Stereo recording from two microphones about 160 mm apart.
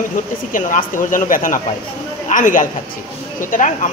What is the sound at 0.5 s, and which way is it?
A woman's voice, 55° left (ahead or behind).